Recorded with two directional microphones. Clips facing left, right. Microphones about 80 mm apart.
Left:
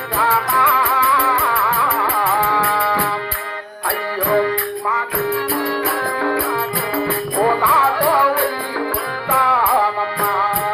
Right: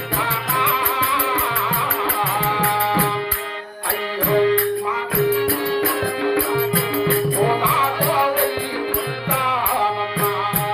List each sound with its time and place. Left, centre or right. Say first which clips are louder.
0.2 s music: left 7 dB; left
4.3 s music: right 2 dB; left
6.2 s music: even; left
9.3 s music: left 6 dB; left